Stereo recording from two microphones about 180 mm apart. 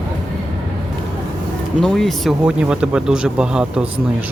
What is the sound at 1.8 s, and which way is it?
Speech, centre (ahead or behind).